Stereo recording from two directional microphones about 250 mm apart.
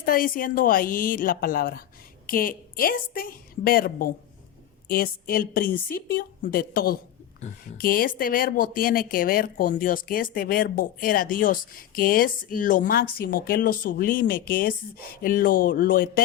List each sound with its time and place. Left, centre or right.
0.0 s a woman's voice: left